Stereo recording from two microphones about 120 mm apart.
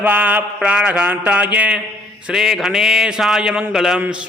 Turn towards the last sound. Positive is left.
turn(degrees=-10)  # may be behind; listen again after turning